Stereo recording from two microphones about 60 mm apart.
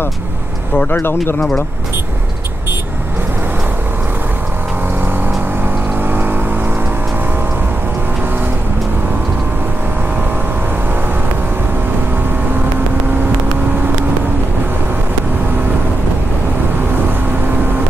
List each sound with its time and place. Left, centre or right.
0.7 s speech: left
6.0 s vehicle: right